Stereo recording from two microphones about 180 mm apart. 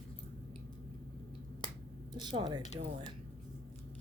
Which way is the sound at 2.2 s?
25° right (ahead or behind).